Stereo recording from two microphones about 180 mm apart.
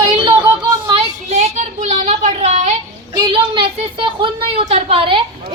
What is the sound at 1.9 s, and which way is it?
Speech, 35° right (ahead or behind).